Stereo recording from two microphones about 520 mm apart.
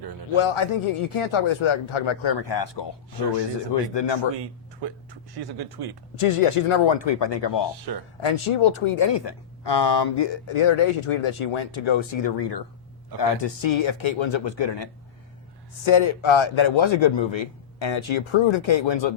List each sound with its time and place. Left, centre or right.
0.3 s speech: left
4.8 s speech: right
6.1 s a man's voice: left
7.9 s speech: right
8.2 s a man's voice: left
10.5 s a man's voice: left
15.8 s a man's voice: left